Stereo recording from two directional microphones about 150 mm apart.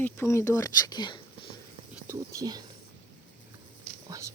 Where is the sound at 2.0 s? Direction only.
20° right (ahead or behind).